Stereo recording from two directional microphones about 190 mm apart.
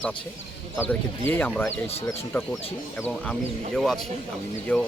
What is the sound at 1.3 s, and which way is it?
Speech, 10° left (ahead or behind).